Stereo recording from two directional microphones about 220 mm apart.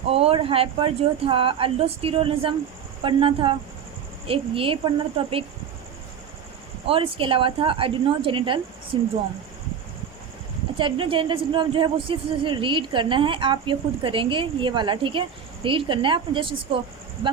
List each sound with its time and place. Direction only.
0.1 s a woman's voice: 25° right (ahead or behind)
6.8 s a woman's voice: 25° right (ahead or behind)
10.8 s a woman's voice: 25° right (ahead or behind)